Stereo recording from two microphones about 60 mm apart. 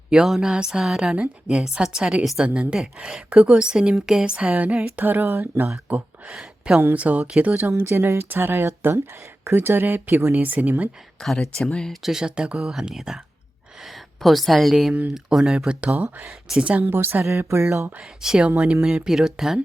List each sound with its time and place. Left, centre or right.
0.1 s a woman's voice: centre
2.2 s a woman's voice: centre
2.5 s a woman's voice: centre; by 5.7 s right
6.2 s speech: centre
6.9 s speech: right
7.8 s speech: right
11.2 s speech: centre
12.0 s a woman's voice: centre
16.8 s speech: right
17.2 s speech: right
18.0 s a woman's voice: centre
19.0 s a woman's voice: centre